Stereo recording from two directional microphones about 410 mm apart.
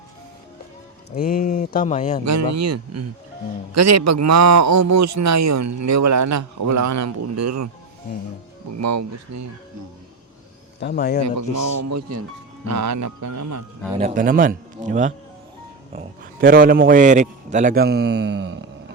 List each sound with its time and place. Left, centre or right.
1.1 s speech: left
2.2 s a man's voice: right
8.8 s a man's voice: right
10.8 s a man's voice: left
11.2 s a man's voice: right
13.9 s a man's voice: centre